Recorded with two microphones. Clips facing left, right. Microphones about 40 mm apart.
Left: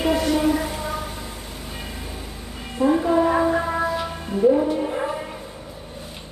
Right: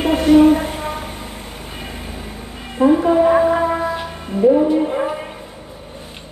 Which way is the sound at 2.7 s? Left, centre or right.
Right.